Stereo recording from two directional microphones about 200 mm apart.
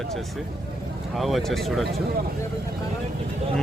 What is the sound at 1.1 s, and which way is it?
Speech, centre (ahead or behind).